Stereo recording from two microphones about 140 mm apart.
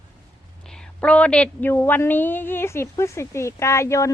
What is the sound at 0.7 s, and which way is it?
A woman's voice, 5° left (ahead or behind).